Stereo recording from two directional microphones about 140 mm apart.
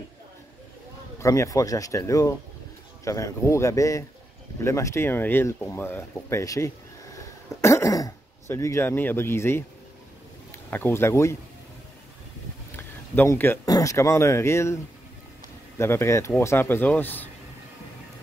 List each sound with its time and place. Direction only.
1.2 s speech: 20° left (ahead or behind)
12.7 s a sound: 15° left (ahead or behind)
13.7 s speech: 25° left (ahead or behind)
15.8 s a man's voice: 20° left (ahead or behind)